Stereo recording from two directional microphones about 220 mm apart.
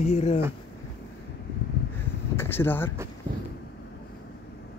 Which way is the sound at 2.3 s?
10° left (ahead or behind).